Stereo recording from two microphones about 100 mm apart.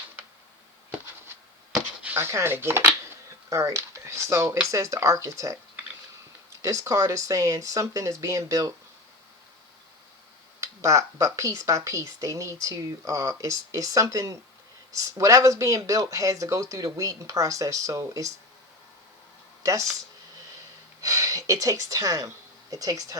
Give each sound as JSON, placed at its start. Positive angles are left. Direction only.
{"t": 2.1, "sound": "speech", "side_deg": -25}
{"t": 10.6, "sound": "speech", "side_deg": -30}
{"t": 19.6, "sound": "speech", "side_deg": -35}
{"t": 21.0, "sound": "a woman's voice", "side_deg": -35}